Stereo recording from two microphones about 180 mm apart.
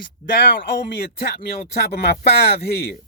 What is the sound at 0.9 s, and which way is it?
A man's voice, 65° left (ahead or behind).